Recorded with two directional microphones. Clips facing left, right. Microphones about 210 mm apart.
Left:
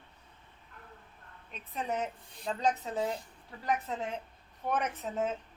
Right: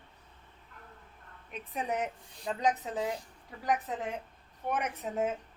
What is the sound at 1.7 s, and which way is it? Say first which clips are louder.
A woman's voice: right 1 dB; 15° right (ahead or behind).